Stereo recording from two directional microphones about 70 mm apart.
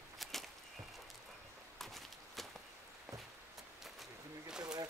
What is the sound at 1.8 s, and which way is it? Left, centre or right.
Walk, centre.